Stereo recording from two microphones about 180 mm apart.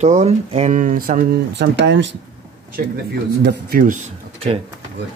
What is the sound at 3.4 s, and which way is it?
Speech, 65° right (ahead or behind).